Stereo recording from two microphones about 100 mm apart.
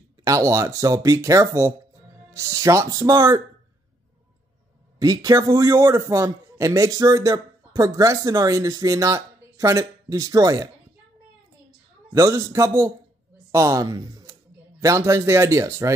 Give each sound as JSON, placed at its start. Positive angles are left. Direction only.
{"t": 0.2, "sound": "a man's voice", "side_deg": -30}
{"t": 4.9, "sound": "a man's voice", "side_deg": -35}
{"t": 12.1, "sound": "a man's voice", "side_deg": -35}